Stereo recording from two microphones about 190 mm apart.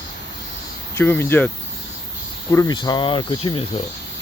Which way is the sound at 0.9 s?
10° left (ahead or behind).